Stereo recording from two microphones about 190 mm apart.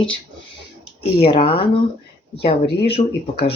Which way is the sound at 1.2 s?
30° left (ahead or behind).